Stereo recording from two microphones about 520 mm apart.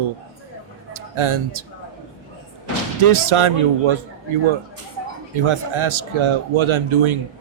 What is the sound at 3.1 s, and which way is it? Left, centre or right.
Speech, right.